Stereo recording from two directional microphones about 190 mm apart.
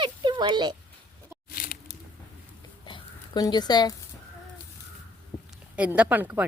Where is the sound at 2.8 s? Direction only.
20° left (ahead or behind).